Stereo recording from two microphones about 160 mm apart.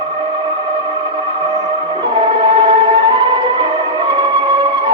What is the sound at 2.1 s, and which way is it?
Music, 30° right (ahead or behind).